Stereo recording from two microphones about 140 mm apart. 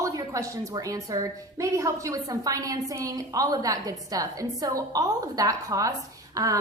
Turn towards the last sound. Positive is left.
turn(degrees=-25)  # may be behind; listen again after turning